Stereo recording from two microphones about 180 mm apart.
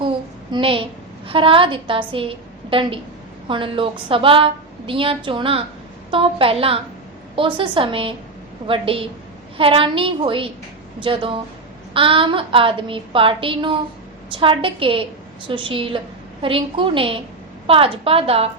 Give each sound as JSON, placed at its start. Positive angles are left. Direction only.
{"t": 0.5, "sound": "a woman's voice", "side_deg": -30}